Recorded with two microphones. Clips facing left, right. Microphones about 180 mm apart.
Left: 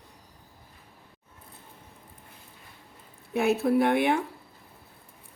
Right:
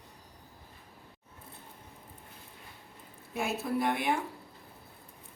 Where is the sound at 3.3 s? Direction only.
65° left (ahead or behind).